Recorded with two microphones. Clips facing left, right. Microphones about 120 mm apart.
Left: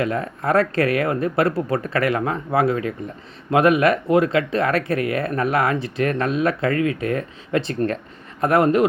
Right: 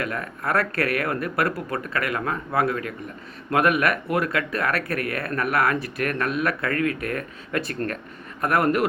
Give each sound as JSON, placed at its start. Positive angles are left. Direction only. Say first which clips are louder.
{"t": 0.0, "sound": "speech", "louder": "left 6 dB", "side_deg": 30}